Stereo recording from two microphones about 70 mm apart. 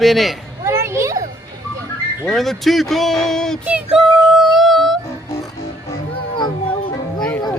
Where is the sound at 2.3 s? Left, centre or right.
Centre.